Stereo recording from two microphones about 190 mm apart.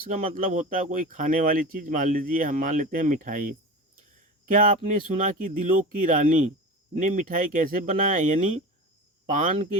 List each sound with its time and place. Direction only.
0.1 s speech: 45° right (ahead or behind)